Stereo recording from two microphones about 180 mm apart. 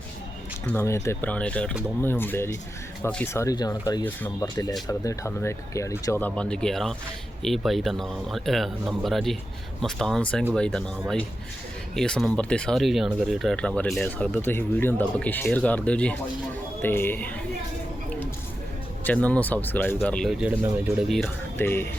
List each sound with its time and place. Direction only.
0.7 s speech: 15° left (ahead or behind)
11.9 s speech: 5° left (ahead or behind)
19.0 s speech: 10° left (ahead or behind)
21.6 s speech: 10° left (ahead or behind)